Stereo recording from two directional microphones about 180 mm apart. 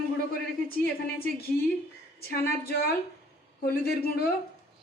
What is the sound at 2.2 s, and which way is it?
A woman's voice, 60° left (ahead or behind).